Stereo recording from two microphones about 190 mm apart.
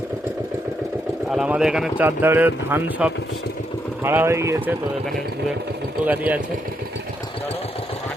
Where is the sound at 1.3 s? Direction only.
5° right (ahead or behind).